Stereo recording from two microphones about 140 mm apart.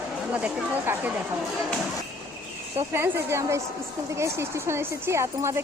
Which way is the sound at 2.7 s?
15° right (ahead or behind).